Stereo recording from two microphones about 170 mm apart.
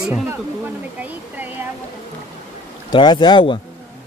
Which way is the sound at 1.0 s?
10° right (ahead or behind).